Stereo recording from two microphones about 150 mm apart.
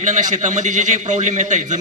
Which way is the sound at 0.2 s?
55° right (ahead or behind).